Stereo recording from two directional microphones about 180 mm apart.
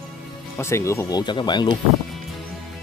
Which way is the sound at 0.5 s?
15° left (ahead or behind).